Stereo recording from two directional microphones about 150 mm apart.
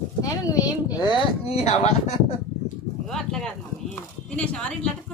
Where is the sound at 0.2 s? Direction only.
25° left (ahead or behind).